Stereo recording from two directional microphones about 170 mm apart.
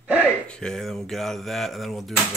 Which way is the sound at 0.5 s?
5° left (ahead or behind).